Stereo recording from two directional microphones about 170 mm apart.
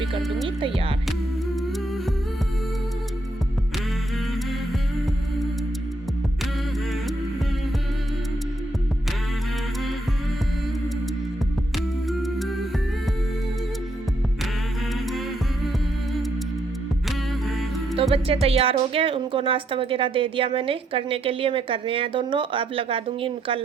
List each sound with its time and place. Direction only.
0.4 s speech: 30° right (ahead or behind)
12.0 s music: centre (ahead or behind)
17.1 s music: centre (ahead or behind)
18.1 s speech: 35° right (ahead or behind)